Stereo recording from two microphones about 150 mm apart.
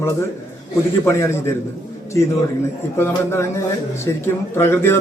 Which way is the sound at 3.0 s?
15° left (ahead or behind).